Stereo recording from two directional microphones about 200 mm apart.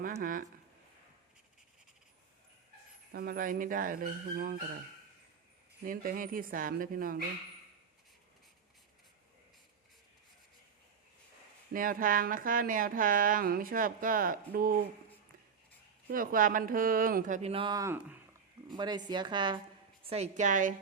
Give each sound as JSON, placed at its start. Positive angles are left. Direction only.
{"t": 0.0, "sound": "speech", "side_deg": -45}
{"t": 3.1, "sound": "speech", "side_deg": -50}
{"t": 5.8, "sound": "speech", "side_deg": -45}
{"t": 11.7, "sound": "speech", "side_deg": -45}
{"t": 16.0, "sound": "speech", "side_deg": -45}
{"t": 18.7, "sound": "a woman's voice", "side_deg": -20}